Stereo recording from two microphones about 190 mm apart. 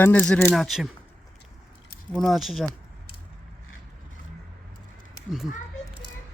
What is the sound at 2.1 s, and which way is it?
Speech, centre (ahead or behind).